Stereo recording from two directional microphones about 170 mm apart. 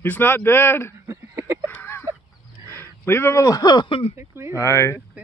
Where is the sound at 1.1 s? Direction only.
15° right (ahead or behind).